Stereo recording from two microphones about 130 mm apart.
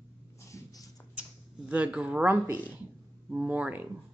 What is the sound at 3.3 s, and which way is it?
Speech, 10° right (ahead or behind).